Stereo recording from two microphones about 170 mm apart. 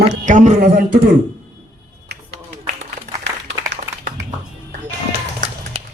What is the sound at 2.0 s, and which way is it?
Music, 80° right.